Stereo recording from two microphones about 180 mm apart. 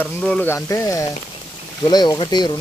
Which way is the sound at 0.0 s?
5° left (ahead or behind).